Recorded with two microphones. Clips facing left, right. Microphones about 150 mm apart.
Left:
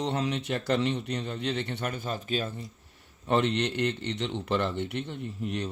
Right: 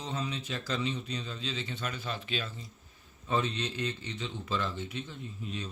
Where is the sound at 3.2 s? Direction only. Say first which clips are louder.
Left 6 dB; 70° left (ahead or behind).